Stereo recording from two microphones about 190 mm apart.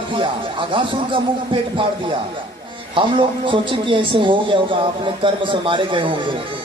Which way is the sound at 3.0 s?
25° right (ahead or behind).